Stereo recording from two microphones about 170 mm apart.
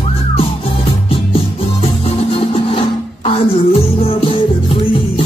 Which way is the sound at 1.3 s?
35° left (ahead or behind).